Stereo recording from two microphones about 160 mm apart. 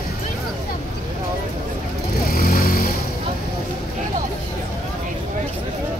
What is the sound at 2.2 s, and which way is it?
Vehicle, 65° left (ahead or behind).